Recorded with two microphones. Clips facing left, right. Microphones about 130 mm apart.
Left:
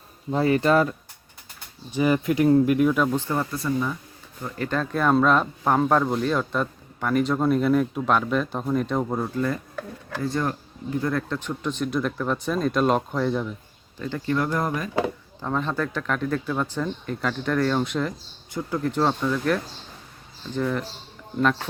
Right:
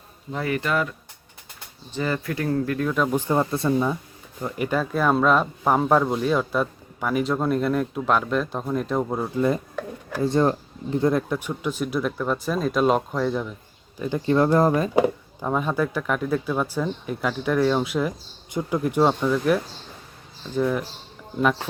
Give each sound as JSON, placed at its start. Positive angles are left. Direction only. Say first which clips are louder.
{"t": 0.3, "sound": "speech", "louder": "left 6 dB", "side_deg": 30}
{"t": 1.9, "sound": "speech", "louder": "left 5 dB", "side_deg": 15}
{"t": 3.1, "sound": "speech", "louder": "right 2 dB", "side_deg": -15}
{"t": 3.3, "sound": "speech", "louder": "right 4 dB", "side_deg": -25}
{"t": 4.4, "sound": "speech", "louder": "right 2 dB", "side_deg": -15}
{"t": 10.2, "sound": "speech", "louder": "right 6 dB", "side_deg": -25}
{"t": 14.0, "sound": "speech", "louder": "right 4 dB", "side_deg": -15}
{"t": 14.3, "sound": "speech", "louder": "right 8 dB", "side_deg": -30}
{"t": 14.9, "sound": "speech", "louder": "right 5 dB", "side_deg": -15}